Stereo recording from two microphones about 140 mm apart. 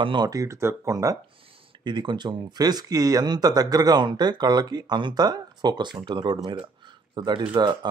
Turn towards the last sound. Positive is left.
turn(degrees=-30)  # may be behind; listen again after turning